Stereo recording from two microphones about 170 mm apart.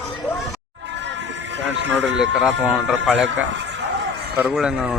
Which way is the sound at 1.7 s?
90° right.